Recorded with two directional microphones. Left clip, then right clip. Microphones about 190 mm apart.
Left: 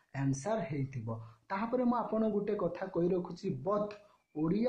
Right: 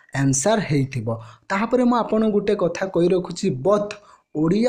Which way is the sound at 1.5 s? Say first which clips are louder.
Right 13 dB; 30° right (ahead or behind).